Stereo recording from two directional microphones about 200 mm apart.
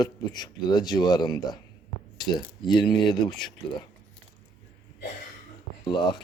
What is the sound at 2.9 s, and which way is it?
Speech, 20° left (ahead or behind).